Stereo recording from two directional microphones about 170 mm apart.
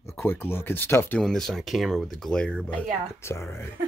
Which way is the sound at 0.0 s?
15° left (ahead or behind).